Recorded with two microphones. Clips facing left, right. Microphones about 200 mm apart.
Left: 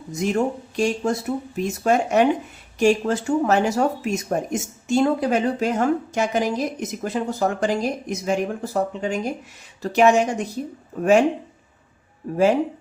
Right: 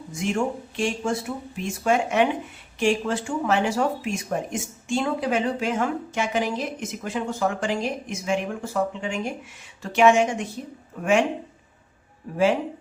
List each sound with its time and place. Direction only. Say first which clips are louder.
0.1 s speech: left 3 dB; 40° left (ahead or behind)